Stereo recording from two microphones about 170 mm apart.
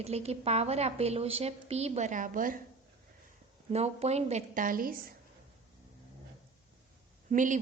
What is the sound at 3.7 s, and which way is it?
Speech, 40° right (ahead or behind).